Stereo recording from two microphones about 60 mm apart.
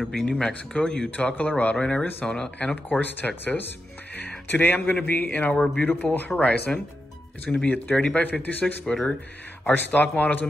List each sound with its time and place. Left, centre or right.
0.0 s speech: centre
2.9 s a man's voice: left
8.8 s speech: centre
9.7 s a man's voice: left